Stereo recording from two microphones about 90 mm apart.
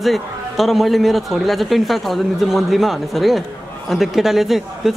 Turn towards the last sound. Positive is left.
turn(degrees=-5)  # may be behind; listen again after turning